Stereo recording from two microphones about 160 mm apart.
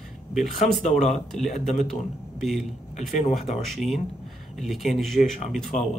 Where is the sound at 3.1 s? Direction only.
45° left (ahead or behind).